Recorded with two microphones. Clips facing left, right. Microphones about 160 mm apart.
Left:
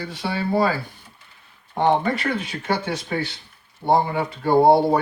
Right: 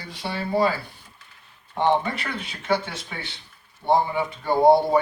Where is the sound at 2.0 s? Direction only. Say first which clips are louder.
Left 6 dB; 55° left (ahead or behind).